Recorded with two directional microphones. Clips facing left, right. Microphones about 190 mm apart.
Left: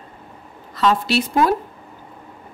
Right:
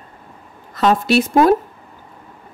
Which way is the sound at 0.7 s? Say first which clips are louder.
Right 4 dB; 50° right (ahead or behind).